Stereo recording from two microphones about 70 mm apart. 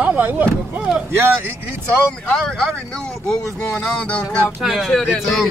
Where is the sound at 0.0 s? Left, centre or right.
Right.